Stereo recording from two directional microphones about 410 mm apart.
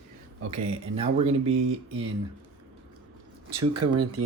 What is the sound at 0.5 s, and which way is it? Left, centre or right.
Speech, centre.